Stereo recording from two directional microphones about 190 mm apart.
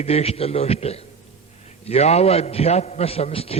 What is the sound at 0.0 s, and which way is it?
A man's voice, 30° left (ahead or behind).